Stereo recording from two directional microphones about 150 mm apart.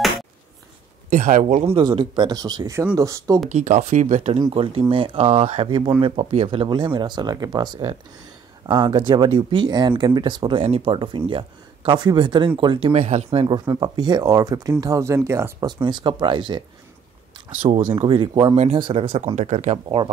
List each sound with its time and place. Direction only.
1.1 s speech: 55° right (ahead or behind)
1.8 s speech: 30° right (ahead or behind)
3.4 s speech: 55° right (ahead or behind)
4.6 s speech: 35° right (ahead or behind)
13.7 s speech: 30° right (ahead or behind)
15.8 s speech: 30° right (ahead or behind)
17.8 s speech: 30° right (ahead or behind)
19.3 s speech: 55° right (ahead or behind)